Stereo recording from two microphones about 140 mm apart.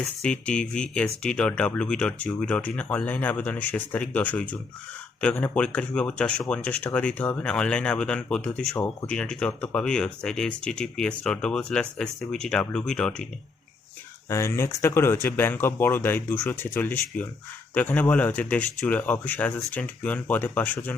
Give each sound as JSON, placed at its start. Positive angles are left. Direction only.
{"t": 0.2, "sound": "speech", "side_deg": 5}
{"t": 14.3, "sound": "speech", "side_deg": 20}